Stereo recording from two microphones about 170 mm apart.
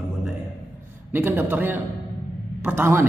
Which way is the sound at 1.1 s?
10° right (ahead or behind).